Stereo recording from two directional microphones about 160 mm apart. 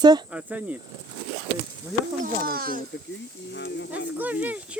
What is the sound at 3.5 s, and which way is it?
Speech, 90° left.